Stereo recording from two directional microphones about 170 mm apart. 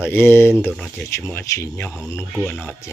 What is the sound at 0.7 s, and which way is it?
Music, 5° left (ahead or behind).